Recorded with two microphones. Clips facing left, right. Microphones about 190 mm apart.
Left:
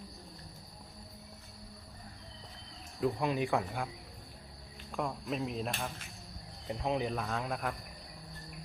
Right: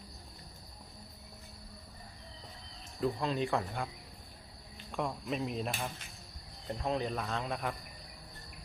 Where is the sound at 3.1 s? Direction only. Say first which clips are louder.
Left 1 dB; 15° left (ahead or behind).